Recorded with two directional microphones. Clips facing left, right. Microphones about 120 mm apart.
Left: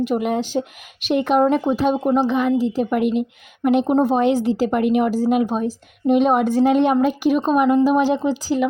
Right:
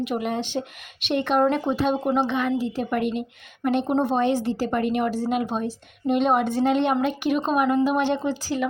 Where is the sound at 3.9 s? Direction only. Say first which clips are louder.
Left 4 dB; 40° left (ahead or behind).